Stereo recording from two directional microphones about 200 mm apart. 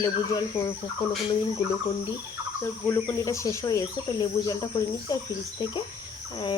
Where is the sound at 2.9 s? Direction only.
15° left (ahead or behind).